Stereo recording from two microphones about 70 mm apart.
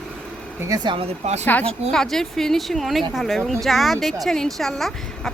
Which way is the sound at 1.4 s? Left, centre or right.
Left.